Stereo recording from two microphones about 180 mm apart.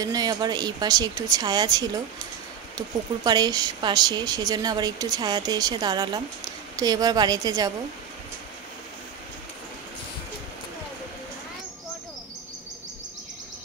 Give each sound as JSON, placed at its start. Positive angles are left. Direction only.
{"t": 0.0, "sound": "a woman's voice", "side_deg": -20}
{"t": 3.3, "sound": "a woman's voice", "side_deg": -20}